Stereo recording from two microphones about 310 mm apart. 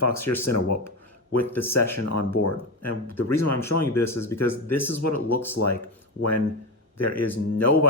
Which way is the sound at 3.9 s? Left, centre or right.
Centre.